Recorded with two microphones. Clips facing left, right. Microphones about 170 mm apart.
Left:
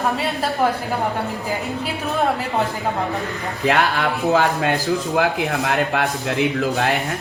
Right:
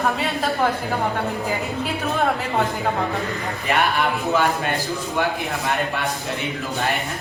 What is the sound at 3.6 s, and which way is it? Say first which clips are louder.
Speech: left 2 dB; 80° left.